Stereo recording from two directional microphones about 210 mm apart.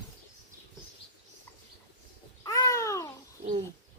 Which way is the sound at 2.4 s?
15° left (ahead or behind).